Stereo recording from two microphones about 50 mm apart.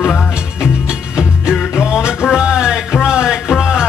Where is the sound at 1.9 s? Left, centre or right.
Centre.